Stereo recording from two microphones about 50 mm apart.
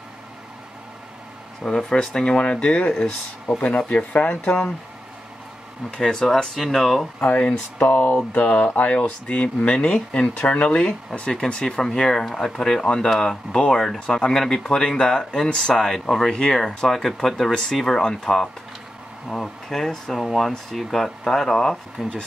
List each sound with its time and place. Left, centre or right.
1.6 s speech: centre
5.9 s speech: centre
7.2 s speech: left
8.5 s speech: centre
10.8 s speech: centre